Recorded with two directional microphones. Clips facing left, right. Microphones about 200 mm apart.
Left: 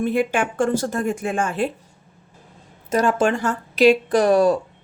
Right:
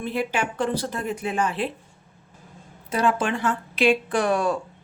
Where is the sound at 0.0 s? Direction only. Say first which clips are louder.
Left 6 dB; 50° left (ahead or behind).